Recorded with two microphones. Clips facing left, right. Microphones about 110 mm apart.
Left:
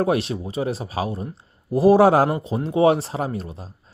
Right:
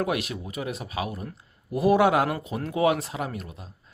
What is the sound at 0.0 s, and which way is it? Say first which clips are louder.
Speech: left 6 dB; 30° left (ahead or behind).